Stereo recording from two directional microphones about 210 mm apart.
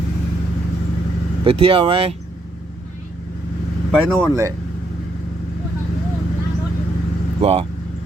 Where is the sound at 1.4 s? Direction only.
25° right (ahead or behind).